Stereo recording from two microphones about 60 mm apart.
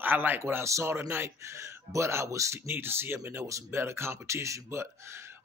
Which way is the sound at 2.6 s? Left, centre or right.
Right.